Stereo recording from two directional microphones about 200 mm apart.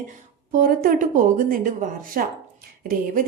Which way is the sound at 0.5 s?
45° right (ahead or behind).